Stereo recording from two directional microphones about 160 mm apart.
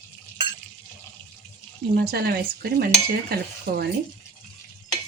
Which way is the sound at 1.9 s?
85° right.